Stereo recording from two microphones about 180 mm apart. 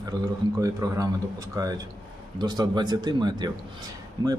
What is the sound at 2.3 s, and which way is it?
A man's voice, 25° right (ahead or behind).